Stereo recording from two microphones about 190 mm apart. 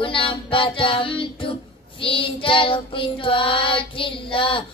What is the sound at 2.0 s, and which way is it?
Child singing, 25° left (ahead or behind).